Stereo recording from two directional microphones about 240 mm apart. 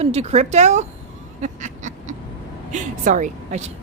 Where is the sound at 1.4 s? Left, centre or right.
Right.